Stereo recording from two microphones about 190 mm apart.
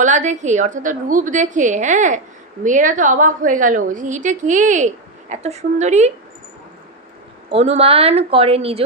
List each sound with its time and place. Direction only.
0.0 s a woman's voice: 40° right (ahead or behind)
7.5 s a woman's voice: 30° right (ahead or behind)